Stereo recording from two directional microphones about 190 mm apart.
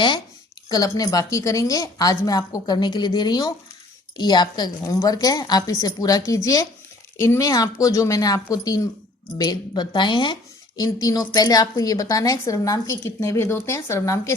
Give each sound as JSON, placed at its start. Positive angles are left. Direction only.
{"t": 0.7, "sound": "a woman's voice", "side_deg": 20}